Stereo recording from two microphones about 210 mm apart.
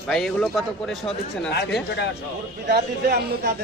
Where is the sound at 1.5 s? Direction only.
50° left (ahead or behind).